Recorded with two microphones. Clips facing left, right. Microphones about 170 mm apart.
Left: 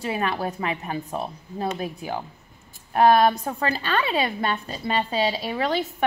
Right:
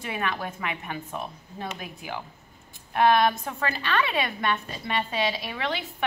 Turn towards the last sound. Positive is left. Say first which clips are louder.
# left 6 dB
turn(degrees=40)  # may be behind; listen again after turning